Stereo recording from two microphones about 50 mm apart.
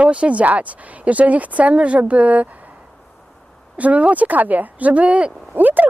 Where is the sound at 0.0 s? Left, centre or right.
Right.